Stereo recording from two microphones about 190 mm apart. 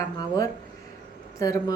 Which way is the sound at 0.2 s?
20° left (ahead or behind).